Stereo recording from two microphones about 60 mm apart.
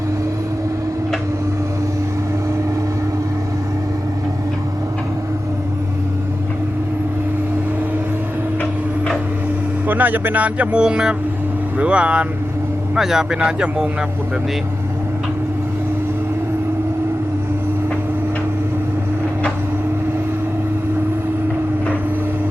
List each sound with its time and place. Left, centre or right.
9.8 s speech: right
13.0 s a man's voice: centre